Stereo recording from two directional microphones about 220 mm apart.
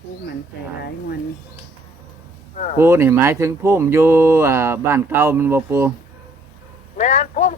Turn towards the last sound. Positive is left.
turn(degrees=35)  # may be behind; listen again after turning